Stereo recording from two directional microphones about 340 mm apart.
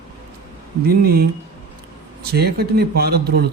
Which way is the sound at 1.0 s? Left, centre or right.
Right.